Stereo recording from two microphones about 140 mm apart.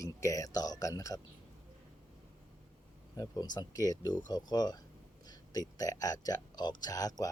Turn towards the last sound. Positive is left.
turn(degrees=25)  # may be behind; listen again after turning